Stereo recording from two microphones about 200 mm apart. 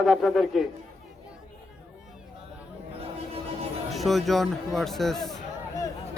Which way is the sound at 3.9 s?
Centre (ahead or behind).